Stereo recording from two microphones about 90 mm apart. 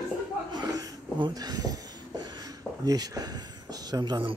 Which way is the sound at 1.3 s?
45° right (ahead or behind).